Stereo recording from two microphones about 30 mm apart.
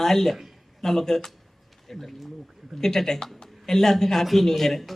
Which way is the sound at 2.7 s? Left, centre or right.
Centre.